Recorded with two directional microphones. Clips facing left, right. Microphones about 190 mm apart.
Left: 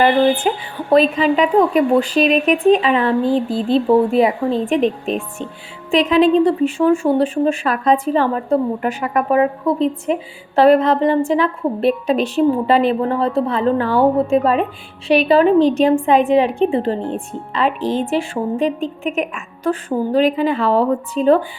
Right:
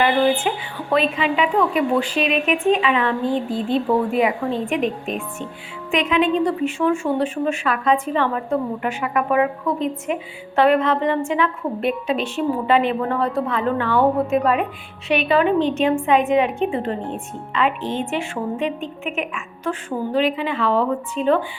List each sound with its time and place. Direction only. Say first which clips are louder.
0.4 s a woman's voice: left 4 dB; 40° left (ahead or behind)